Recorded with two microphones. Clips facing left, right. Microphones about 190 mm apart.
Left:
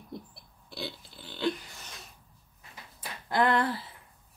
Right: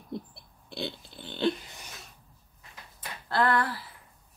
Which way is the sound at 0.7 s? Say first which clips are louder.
Right 3 dB; 25° right (ahead or behind).